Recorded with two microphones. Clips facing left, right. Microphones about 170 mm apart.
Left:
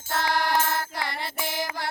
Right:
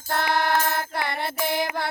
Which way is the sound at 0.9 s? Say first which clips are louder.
Right 4 dB; 60° right (ahead or behind).